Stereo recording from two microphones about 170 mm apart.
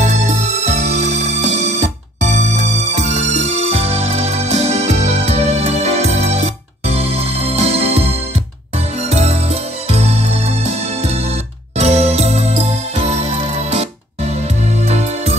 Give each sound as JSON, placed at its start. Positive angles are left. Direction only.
{"t": 0.0, "sound": "music", "side_deg": -45}